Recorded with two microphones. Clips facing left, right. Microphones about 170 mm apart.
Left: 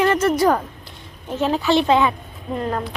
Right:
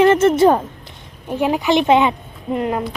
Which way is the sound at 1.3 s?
15° right (ahead or behind).